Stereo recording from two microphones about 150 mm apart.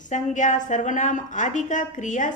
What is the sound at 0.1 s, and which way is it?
A woman's voice, 55° left (ahead or behind).